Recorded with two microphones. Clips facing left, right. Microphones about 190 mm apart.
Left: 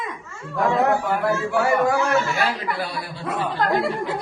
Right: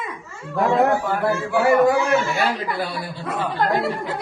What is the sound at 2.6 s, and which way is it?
Speech, 25° right (ahead or behind).